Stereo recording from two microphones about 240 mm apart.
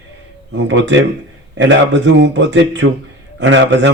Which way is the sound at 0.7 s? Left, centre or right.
Right.